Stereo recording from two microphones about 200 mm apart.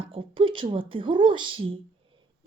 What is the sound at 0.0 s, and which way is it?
A woman's voice, 25° right (ahead or behind).